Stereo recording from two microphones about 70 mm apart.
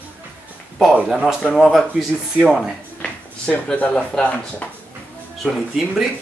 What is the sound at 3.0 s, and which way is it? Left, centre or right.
Speech, centre.